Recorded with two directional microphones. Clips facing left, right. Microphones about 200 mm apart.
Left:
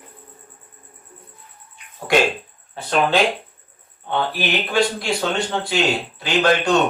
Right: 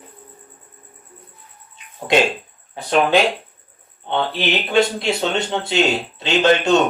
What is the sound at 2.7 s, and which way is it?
Speech, 15° right (ahead or behind).